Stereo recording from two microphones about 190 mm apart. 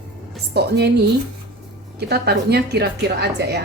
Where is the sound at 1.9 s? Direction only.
60° right (ahead or behind).